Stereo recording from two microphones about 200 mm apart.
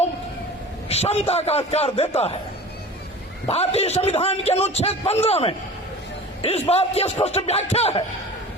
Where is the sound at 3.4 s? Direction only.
30° left (ahead or behind).